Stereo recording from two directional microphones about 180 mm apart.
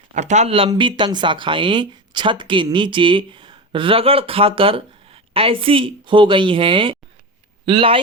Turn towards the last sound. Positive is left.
turn(degrees=-30)  # may be behind; listen again after turning